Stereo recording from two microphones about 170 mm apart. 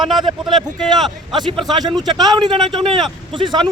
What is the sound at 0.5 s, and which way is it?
Speech, centre (ahead or behind).